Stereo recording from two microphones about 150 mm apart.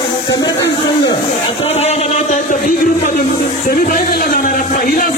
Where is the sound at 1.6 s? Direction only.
45° left (ahead or behind).